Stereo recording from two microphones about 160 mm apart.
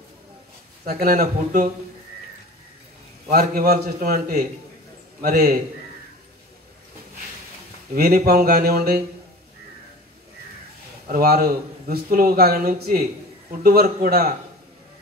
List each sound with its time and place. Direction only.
0.8 s a man's voice: 70° right (ahead or behind)
3.3 s a man's voice: 70° right (ahead or behind)
7.9 s a man's voice: 70° right (ahead or behind)
11.1 s a man's voice: 70° right (ahead or behind)